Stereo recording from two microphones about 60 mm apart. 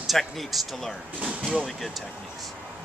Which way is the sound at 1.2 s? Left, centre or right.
Right.